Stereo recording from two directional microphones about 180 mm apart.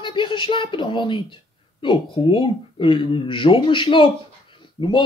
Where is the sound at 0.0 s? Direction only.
25° left (ahead or behind).